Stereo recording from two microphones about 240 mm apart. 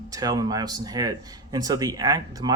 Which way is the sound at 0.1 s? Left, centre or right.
Centre.